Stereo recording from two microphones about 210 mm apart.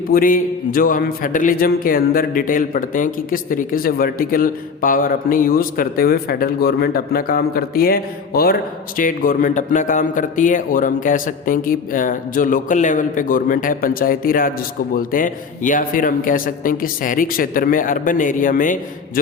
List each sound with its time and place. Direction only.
0.1 s a man's voice: 40° left (ahead or behind)